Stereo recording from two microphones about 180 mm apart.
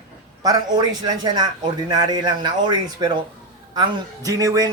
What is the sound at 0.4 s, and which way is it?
Speech, 20° right (ahead or behind).